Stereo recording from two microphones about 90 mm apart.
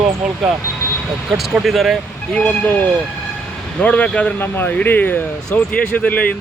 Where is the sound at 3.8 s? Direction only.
15° left (ahead or behind).